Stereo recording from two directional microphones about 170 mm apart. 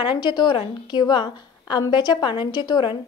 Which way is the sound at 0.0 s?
25° left (ahead or behind).